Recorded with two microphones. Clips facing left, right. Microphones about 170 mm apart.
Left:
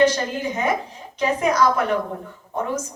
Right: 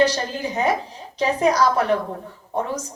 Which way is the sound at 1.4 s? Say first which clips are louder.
Right 1 dB; 35° right (ahead or behind).